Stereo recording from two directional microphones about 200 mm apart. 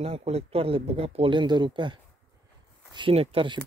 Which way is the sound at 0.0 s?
30° right (ahead or behind).